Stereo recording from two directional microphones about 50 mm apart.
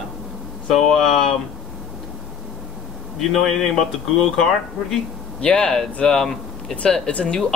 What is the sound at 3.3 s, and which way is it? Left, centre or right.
Speech, centre.